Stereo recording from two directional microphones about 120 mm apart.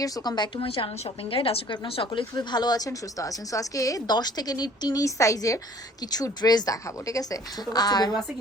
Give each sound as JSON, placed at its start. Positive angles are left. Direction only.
{"t": 0.0, "sound": "a woman's voice", "side_deg": 35}